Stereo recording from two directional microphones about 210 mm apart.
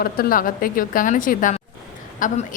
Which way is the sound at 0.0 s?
40° left (ahead or behind).